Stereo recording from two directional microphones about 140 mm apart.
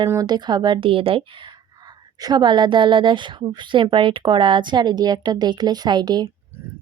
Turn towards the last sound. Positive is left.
turn(degrees=-30)  # may be behind; listen again after turning